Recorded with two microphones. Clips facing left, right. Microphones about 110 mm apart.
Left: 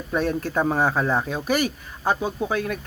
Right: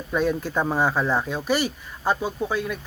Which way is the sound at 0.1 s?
Centre (ahead or behind).